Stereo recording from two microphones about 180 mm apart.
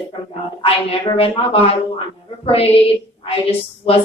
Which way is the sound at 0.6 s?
30° left (ahead or behind).